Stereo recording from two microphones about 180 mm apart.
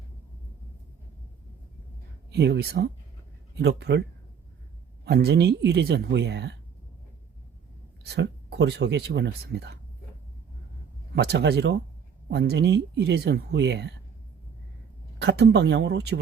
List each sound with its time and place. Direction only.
2.3 s speech: 65° right (ahead or behind)
5.0 s speech: 65° right (ahead or behind)
8.0 s speech: 65° right (ahead or behind)
11.1 s speech: 65° right (ahead or behind)
15.2 s speech: 70° right (ahead or behind)